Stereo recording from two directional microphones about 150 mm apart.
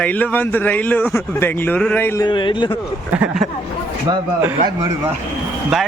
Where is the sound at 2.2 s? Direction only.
35° left (ahead or behind).